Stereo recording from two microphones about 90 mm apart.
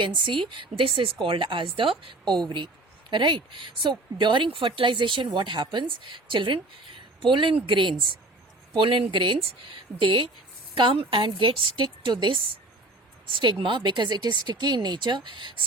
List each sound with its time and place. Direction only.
0.0 s speech: 65° right (ahead or behind)